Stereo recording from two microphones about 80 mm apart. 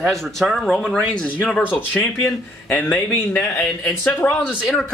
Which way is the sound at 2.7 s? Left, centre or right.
Left.